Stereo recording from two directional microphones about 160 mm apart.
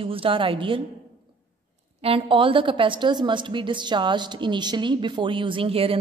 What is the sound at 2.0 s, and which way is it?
A woman's voice, 35° right (ahead or behind).